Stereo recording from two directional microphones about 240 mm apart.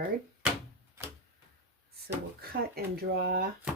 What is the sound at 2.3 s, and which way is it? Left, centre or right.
Speech, right.